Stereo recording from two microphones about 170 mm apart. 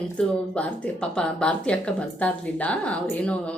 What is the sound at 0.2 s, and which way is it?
Speech, 5° left (ahead or behind).